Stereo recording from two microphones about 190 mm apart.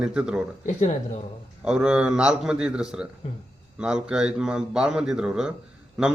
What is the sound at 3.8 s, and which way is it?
A man's voice, 5° right (ahead or behind).